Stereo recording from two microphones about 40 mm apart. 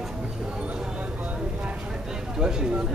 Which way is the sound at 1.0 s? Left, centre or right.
Right.